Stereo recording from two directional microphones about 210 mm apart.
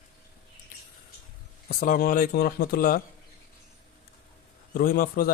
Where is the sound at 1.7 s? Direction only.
40° left (ahead or behind).